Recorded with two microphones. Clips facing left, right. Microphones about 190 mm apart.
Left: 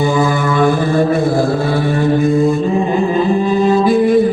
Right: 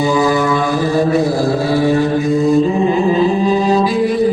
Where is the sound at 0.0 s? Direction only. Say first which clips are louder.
Right 1 dB; 55° left (ahead or behind).